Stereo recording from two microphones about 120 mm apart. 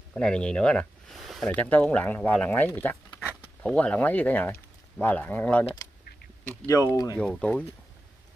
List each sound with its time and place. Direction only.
0.1 s speech: 5° left (ahead or behind)
1.5 s speech: 10° left (ahead or behind)
6.6 s speech: 25° left (ahead or behind)
7.2 s speech: 10° left (ahead or behind)